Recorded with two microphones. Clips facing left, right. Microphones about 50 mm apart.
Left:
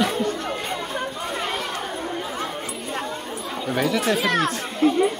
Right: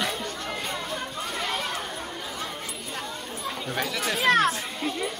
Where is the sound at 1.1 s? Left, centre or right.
Centre.